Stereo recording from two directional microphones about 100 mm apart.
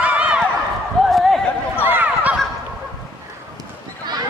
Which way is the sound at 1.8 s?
15° right (ahead or behind).